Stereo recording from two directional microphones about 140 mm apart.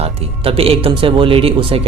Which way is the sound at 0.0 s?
40° right (ahead or behind).